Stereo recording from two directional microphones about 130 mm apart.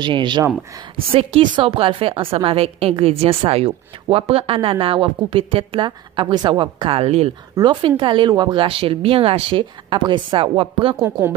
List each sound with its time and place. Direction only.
0.0 s a woman's voice: 35° right (ahead or behind)
7.5 s speech: 40° right (ahead or behind)
11.0 s a woman's voice: 15° right (ahead or behind)